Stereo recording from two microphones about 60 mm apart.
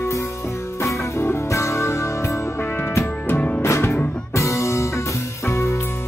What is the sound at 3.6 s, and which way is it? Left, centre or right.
Music, left.